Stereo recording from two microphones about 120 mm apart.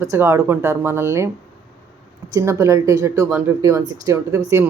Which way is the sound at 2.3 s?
25° right (ahead or behind).